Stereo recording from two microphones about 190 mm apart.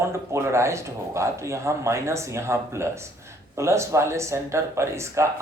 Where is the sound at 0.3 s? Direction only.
15° right (ahead or behind).